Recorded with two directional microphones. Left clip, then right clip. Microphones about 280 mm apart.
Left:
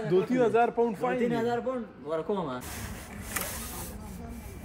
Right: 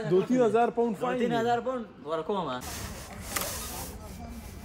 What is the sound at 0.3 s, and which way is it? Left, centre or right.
Speech, right.